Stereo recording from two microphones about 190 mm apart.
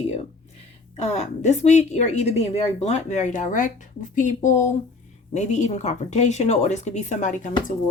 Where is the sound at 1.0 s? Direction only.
35° left (ahead or behind).